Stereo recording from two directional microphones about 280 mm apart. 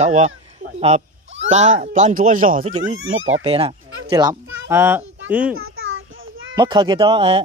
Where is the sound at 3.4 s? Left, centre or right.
Centre.